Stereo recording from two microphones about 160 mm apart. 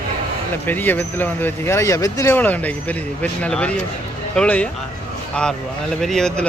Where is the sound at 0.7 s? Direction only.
10° left (ahead or behind).